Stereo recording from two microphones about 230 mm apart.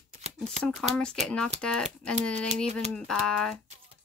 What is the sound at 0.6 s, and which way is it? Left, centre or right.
Speech, centre.